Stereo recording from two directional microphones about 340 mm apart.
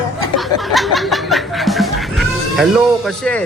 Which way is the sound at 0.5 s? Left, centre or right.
Centre.